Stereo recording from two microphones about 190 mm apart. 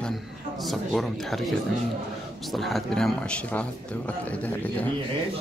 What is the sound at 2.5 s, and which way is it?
Speech, centre (ahead or behind).